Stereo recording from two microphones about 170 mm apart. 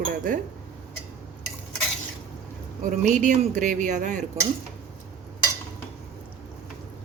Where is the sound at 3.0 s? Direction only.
45° right (ahead or behind).